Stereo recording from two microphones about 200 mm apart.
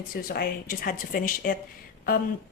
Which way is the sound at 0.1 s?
45° left (ahead or behind).